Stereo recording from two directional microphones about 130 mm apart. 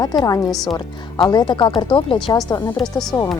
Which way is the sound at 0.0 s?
30° left (ahead or behind).